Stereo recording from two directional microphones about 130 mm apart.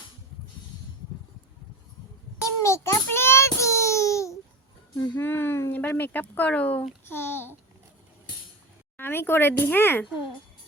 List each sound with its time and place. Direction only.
2.4 s child singing: 25° left (ahead or behind)
5.0 s a sound: 15° left (ahead or behind)
9.0 s speech: 15° left (ahead or behind)